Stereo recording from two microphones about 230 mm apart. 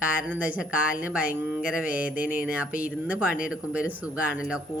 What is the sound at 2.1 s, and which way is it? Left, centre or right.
Speech, left.